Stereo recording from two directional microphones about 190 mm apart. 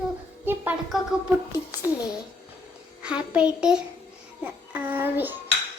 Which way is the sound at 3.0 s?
5° right (ahead or behind).